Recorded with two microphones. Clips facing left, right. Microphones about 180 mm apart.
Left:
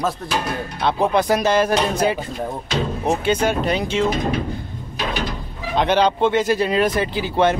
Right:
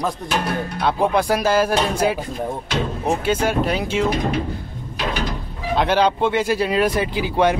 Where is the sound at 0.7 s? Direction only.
10° right (ahead or behind).